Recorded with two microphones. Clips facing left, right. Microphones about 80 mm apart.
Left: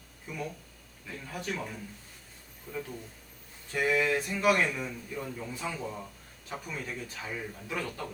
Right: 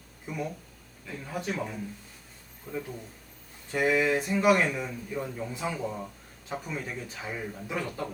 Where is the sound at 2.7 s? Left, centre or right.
Right.